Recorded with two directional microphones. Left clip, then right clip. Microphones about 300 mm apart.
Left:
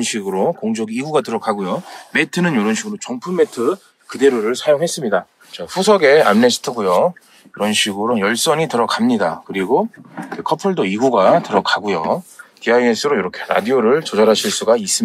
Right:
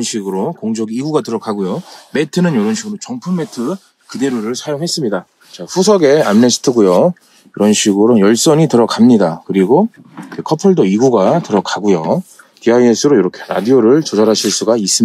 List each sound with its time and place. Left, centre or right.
0.0 s speech: centre